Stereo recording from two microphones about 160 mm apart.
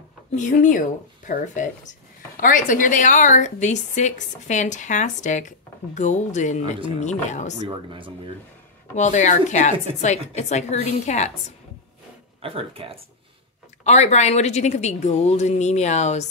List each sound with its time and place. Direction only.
0.3 s a woman's voice: 50° left (ahead or behind)
7.6 s speech: 30° right (ahead or behind)
8.9 s a woman's voice: 50° left (ahead or behind)
12.4 s speech: 35° right (ahead or behind)
13.8 s a woman's voice: 45° left (ahead or behind)